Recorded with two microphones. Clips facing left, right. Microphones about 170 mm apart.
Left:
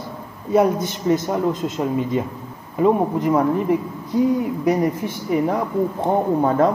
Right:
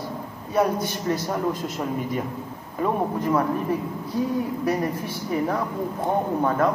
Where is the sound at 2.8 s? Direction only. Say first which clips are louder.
Left 7 dB; 20° left (ahead or behind).